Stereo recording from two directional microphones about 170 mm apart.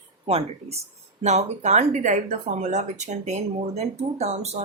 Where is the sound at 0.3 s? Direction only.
35° right (ahead or behind).